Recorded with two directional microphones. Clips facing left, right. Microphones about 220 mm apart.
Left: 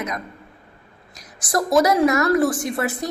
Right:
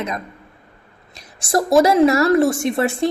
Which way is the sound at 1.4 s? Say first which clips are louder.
Right 3 dB; 25° right (ahead or behind).